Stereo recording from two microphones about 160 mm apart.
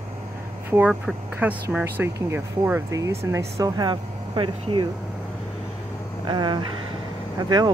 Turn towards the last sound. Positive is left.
turn(degrees=-25)  # may be behind; listen again after turning